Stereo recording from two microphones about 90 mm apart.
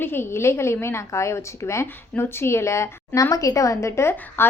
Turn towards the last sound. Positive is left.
turn(degrees=30)  # may be behind; listen again after turning